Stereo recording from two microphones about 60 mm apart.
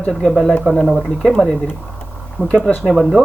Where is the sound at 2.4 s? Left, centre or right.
Left.